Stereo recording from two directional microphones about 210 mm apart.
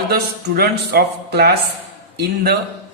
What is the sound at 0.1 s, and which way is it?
Speech, 45° right (ahead or behind).